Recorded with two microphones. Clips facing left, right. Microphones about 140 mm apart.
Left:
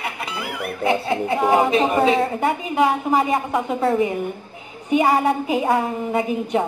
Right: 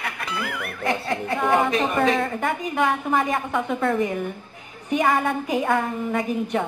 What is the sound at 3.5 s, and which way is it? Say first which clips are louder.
Speech: left 1 dB; 30° left (ahead or behind).